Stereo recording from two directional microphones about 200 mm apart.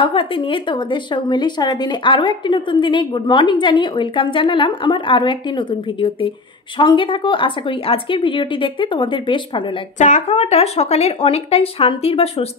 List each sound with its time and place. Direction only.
0.0 s a woman's voice: 25° left (ahead or behind)
9.9 s speech: 35° left (ahead or behind)